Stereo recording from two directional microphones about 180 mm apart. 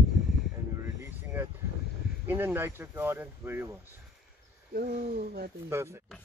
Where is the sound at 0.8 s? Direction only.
15° right (ahead or behind).